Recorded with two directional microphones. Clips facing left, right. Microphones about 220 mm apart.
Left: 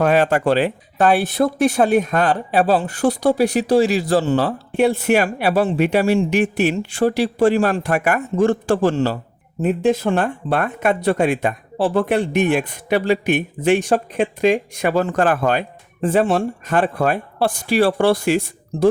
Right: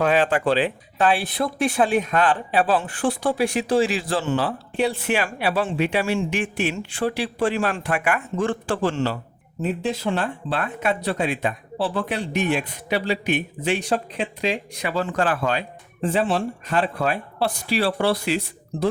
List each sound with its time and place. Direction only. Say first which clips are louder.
0.0 s speech: left 4 dB; 45° left (ahead or behind)
9.6 s speech: left 8 dB; 50° left (ahead or behind)